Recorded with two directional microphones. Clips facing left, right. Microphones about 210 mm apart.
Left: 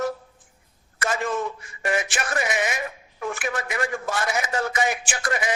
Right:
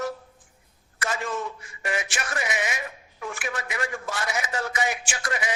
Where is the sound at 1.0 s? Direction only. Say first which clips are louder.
Left 4 dB; 50° left (ahead or behind).